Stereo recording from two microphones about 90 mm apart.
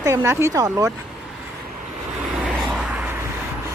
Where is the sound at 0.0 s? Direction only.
30° right (ahead or behind).